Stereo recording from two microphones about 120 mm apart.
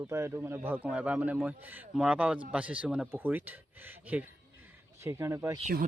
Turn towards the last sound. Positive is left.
turn(degrees=-25)  # may be behind; listen again after turning